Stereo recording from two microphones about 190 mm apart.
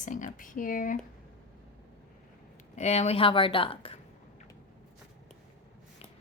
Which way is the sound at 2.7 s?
35° left (ahead or behind).